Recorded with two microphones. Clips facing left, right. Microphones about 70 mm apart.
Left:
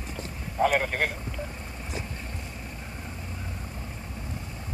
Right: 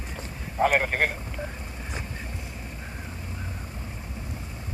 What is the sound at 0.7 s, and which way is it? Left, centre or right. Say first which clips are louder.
Speech: right 2 dB; right.